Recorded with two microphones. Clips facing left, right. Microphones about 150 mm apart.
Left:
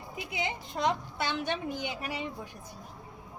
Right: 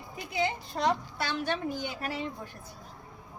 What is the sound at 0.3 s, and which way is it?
A woman's voice, 20° left (ahead or behind).